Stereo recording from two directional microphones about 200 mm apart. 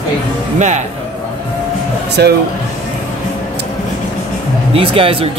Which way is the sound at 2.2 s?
55° right (ahead or behind).